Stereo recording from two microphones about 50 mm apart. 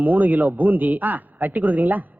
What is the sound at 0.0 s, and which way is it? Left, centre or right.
A man's voice, right.